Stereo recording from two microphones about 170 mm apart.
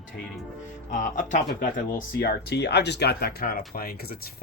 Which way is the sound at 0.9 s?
50° left (ahead or behind).